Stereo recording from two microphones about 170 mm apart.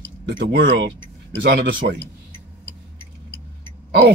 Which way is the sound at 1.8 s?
45° right (ahead or behind).